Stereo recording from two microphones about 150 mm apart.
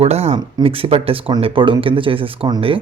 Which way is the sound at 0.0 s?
45° right (ahead or behind).